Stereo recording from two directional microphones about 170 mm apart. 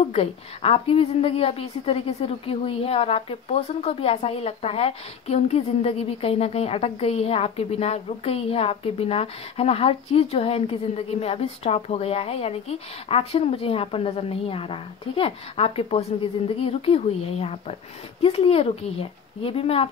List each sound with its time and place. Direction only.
0.0 s a woman's voice: 35° left (ahead or behind)